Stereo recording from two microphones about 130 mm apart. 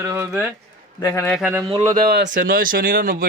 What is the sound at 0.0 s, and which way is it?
Speech, 20° right (ahead or behind).